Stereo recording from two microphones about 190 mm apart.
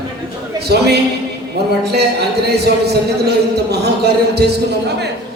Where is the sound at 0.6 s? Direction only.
60° right (ahead or behind).